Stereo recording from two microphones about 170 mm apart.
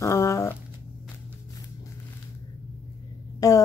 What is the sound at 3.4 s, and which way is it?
Speech, 20° left (ahead or behind).